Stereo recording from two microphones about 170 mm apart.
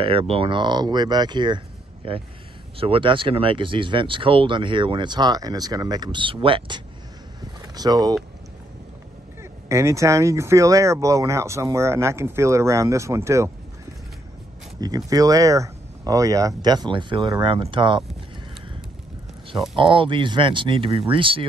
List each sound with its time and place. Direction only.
0.0 s speech: 35° right (ahead or behind)
9.4 s speech: 15° right (ahead or behind)
14.8 s speech: 20° right (ahead or behind)
19.7 s speech: 30° right (ahead or behind)